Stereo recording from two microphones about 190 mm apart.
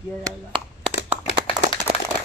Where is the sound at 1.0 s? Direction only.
30° left (ahead or behind).